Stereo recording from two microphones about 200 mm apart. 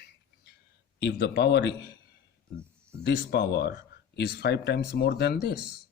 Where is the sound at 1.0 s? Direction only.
60° left (ahead or behind).